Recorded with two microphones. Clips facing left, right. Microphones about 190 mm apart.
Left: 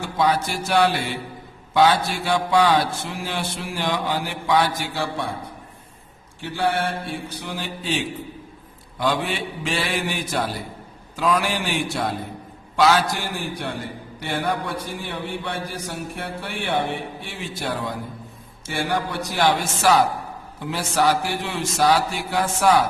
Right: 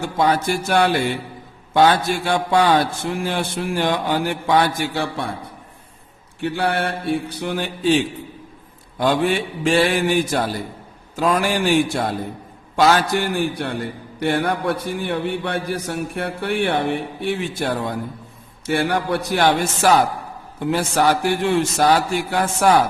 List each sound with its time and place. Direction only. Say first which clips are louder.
0.0 s speech: right 2 dB; 50° right (ahead or behind)
6.4 s a man's voice: right 2 dB; 60° right (ahead or behind)
9.0 s a man's voice: right 5 dB; 50° right (ahead or behind)